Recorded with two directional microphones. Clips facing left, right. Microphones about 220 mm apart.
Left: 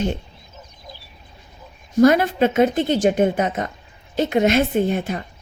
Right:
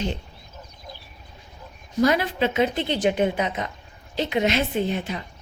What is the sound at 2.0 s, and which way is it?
Speech, 50° left (ahead or behind).